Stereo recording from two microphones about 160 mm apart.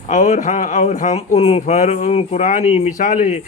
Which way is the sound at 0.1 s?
50° left (ahead or behind).